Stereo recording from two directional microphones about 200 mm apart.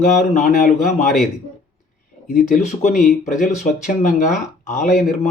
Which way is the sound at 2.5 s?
35° left (ahead or behind).